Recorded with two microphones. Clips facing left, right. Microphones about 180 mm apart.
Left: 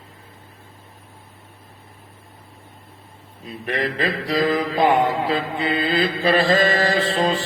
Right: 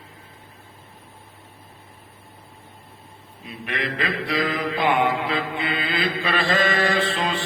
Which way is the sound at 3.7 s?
35° left (ahead or behind).